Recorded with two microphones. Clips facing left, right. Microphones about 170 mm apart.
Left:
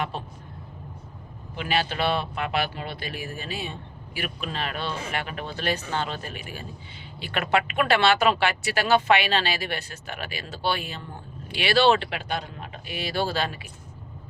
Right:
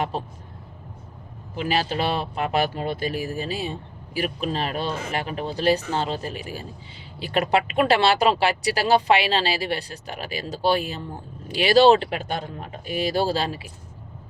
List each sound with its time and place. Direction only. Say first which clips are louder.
1.5 s speech: right 3 dB; 35° right (ahead or behind)